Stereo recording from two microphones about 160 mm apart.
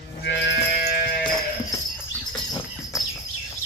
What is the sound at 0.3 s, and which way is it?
Sheep, 90° left.